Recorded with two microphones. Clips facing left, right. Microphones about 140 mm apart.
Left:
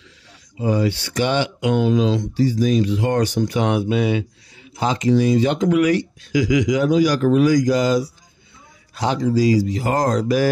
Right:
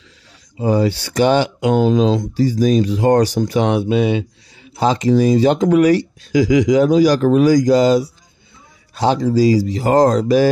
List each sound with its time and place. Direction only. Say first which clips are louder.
0.6 s speech: right 4 dB; 35° right (ahead or behind)